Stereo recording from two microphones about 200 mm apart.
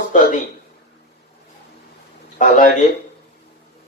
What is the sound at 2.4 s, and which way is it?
Speech, 40° left (ahead or behind).